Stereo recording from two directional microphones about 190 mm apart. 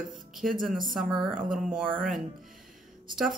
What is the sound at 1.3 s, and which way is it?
Music, 45° right (ahead or behind).